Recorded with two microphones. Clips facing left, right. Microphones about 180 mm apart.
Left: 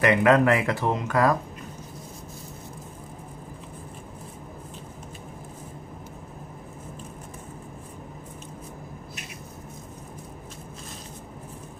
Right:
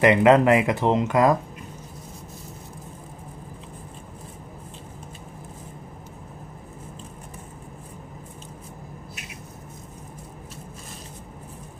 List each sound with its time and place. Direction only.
0.0 s speech: 20° right (ahead or behind)